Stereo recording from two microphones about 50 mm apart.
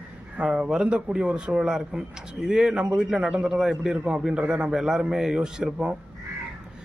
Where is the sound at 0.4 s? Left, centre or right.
Centre.